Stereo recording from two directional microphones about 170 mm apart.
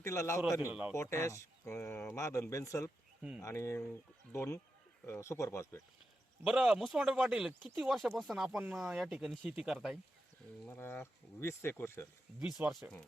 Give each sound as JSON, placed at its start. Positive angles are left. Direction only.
{"t": 0.0, "sound": "speech", "side_deg": 15}
{"t": 0.6, "sound": "speech", "side_deg": -5}
{"t": 0.9, "sound": "speech", "side_deg": 15}
{"t": 6.4, "sound": "speech", "side_deg": -5}
{"t": 10.7, "sound": "speech", "side_deg": 15}
{"t": 12.4, "sound": "speech", "side_deg": -5}